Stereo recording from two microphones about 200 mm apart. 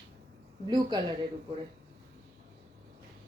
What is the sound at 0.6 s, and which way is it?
Speech, 20° right (ahead or behind).